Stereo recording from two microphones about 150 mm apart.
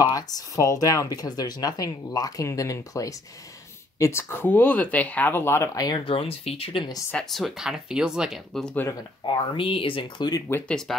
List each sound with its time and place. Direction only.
0.0 s speech: 25° left (ahead or behind)
6.0 s speech: 40° left (ahead or behind)
7.1 s speech: 5° left (ahead or behind)
9.2 s speech: 35° left (ahead or behind)
10.5 s speech: 5° left (ahead or behind)